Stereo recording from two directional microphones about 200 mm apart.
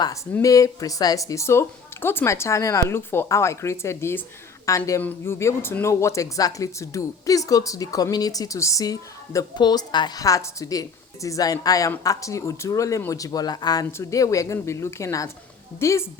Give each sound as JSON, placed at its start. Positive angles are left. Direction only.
{"t": 0.0, "sound": "speech", "side_deg": 15}